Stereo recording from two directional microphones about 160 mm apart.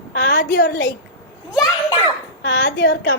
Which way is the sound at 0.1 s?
80° left.